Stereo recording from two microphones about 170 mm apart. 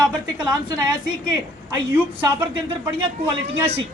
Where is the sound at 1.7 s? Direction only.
10° right (ahead or behind).